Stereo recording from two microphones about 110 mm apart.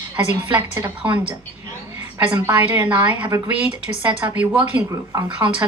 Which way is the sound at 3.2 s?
30° right (ahead or behind).